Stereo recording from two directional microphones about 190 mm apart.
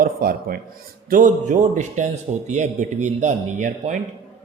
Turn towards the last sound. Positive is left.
turn(degrees=-40)  # may be behind; listen again after turning